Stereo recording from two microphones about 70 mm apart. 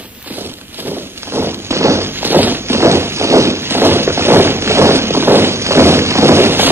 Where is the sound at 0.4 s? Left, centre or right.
Right.